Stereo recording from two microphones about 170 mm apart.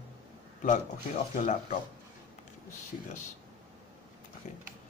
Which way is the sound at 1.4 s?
45° left (ahead or behind).